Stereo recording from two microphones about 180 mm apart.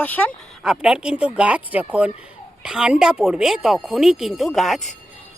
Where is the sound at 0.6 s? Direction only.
5° right (ahead or behind).